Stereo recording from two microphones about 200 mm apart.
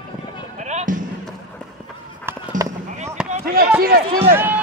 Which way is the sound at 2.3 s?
15° right (ahead or behind).